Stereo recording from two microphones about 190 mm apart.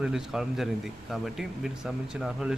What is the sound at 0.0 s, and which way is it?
Speech, 5° right (ahead or behind).